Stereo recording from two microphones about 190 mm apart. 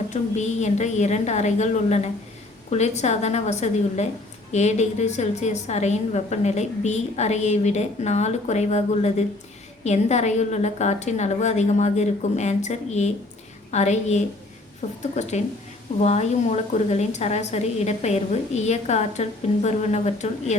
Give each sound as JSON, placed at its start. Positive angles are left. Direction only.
{"t": 0.1, "sound": "a woman's voice", "side_deg": 40}